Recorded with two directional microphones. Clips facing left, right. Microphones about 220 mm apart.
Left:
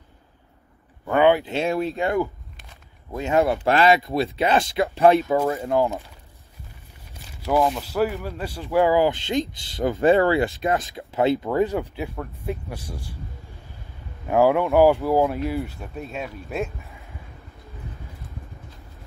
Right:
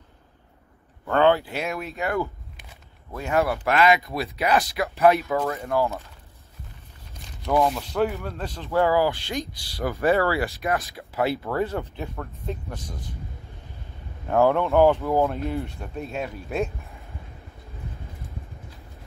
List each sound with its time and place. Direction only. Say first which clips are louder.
1.0 s a sound: left 2 dB; 15° left (ahead or behind)
1.4 s speech: left 7 dB; 25° left (ahead or behind)
3.1 s speech: left 3 dB; 15° left (ahead or behind)
5.8 s speech: left 1 dB; 15° left (ahead or behind)
7.2 s speech: left 1 dB; centre (ahead or behind)
14.2 s speech: left 2 dB; 10° left (ahead or behind)